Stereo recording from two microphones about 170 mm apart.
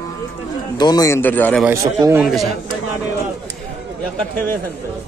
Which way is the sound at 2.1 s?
Centre (ahead or behind).